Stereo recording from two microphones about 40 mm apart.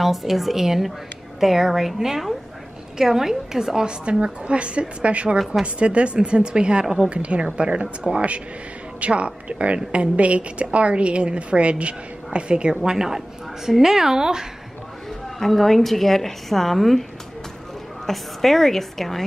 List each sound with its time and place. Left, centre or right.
0.0 s a woman's voice: centre
4.0 s a woman's voice: right
12.9 s a woman's voice: centre
15.3 s a woman's voice: centre
18.0 s a woman's voice: centre